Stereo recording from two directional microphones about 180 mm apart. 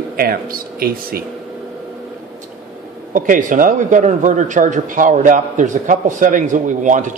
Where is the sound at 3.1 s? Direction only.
45° right (ahead or behind).